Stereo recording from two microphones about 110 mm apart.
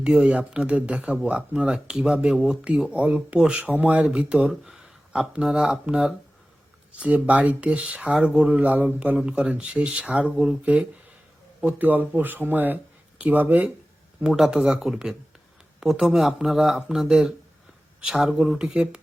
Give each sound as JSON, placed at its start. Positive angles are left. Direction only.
{"t": 0.0, "sound": "speech", "side_deg": -10}